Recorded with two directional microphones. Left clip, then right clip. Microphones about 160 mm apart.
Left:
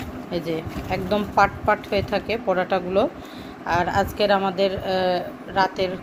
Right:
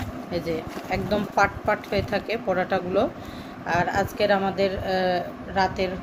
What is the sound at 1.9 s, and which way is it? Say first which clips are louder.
Speech: left 2 dB; 5° left (ahead or behind).